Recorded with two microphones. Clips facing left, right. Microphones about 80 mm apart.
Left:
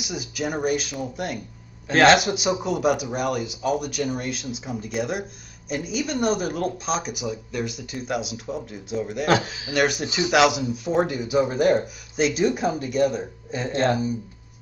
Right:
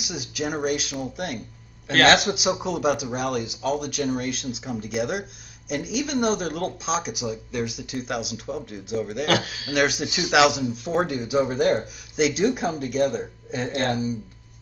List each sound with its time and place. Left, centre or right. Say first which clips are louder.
0.0 s speech: left 1 dB; centre
9.3 s speech: left 4 dB; left
9.8 s speech: left 1 dB; centre